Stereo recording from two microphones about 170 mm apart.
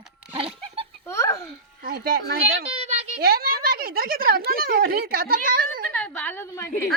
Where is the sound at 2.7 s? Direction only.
40° right (ahead or behind).